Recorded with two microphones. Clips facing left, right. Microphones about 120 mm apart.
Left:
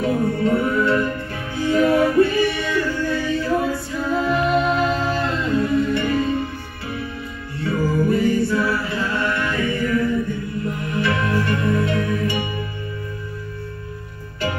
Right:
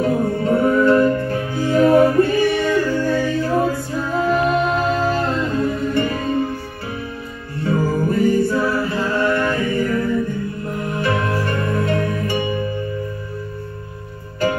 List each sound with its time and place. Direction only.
0.0 s music: 45° right (ahead or behind)
7.6 s music: 40° right (ahead or behind)